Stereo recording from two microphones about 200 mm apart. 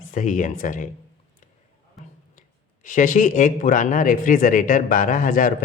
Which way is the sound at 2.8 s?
40° left (ahead or behind).